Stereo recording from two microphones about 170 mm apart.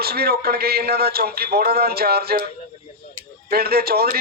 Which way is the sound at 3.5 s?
65° right (ahead or behind).